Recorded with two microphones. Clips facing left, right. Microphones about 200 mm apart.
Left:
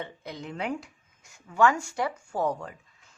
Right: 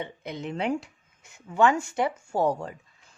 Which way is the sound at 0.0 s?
20° right (ahead or behind).